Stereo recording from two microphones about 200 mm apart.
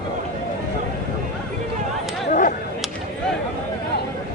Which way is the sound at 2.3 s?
40° left (ahead or behind).